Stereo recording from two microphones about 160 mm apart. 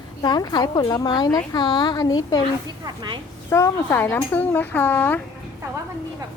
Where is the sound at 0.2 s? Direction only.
25° left (ahead or behind).